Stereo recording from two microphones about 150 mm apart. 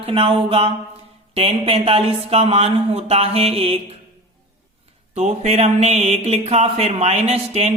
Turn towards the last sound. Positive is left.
turn(degrees=-45)  # may be behind; listen again after turning